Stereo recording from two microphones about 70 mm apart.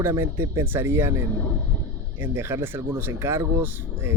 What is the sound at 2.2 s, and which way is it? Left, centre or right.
Speech, right.